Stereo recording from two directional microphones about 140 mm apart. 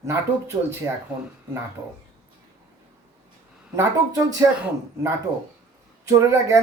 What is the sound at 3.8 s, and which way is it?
Speech, 25° right (ahead or behind).